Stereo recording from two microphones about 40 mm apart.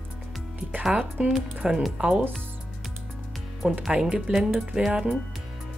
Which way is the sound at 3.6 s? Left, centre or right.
Right.